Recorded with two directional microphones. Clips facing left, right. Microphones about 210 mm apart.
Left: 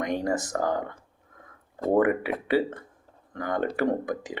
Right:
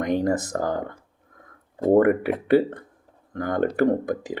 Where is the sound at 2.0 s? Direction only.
50° right (ahead or behind).